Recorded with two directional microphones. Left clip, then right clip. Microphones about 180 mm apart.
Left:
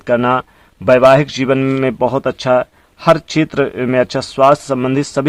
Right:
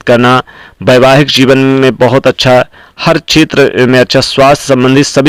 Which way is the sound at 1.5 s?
15° right (ahead or behind).